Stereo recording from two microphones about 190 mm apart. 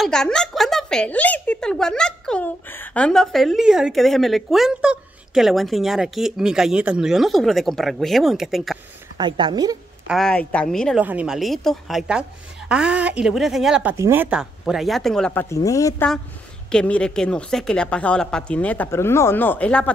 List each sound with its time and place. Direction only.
0.0 s a woman's voice: 5° left (ahead or behind)
9.2 s a woman's voice: 25° right (ahead or behind)
10.0 s a woman's voice: centre (ahead or behind)
13.9 s a woman's voice: 15° right (ahead or behind); by 15.4 s 5° left (ahead or behind)
15.5 s a woman's voice: 15° left (ahead or behind)
16.7 s a woman's voice: 5° left (ahead or behind)